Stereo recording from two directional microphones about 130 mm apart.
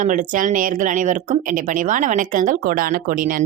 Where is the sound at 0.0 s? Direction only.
80° right.